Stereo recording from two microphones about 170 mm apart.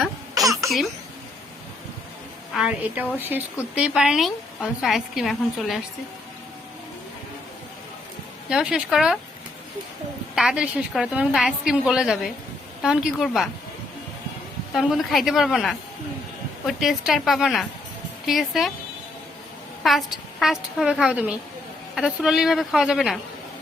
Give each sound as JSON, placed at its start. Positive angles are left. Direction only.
{"t": 0.4, "sound": "baby laughter", "side_deg": -20}
{"t": 2.6, "sound": "a woman's voice", "side_deg": -10}
{"t": 8.4, "sound": "a woman's voice", "side_deg": -5}
{"t": 10.3, "sound": "a woman's voice", "side_deg": -5}
{"t": 14.7, "sound": "a woman's voice", "side_deg": 0}
{"t": 20.7, "sound": "a woman's voice", "side_deg": 0}